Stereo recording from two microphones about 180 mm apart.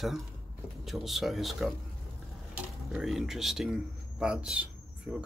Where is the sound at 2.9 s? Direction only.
Centre (ahead or behind).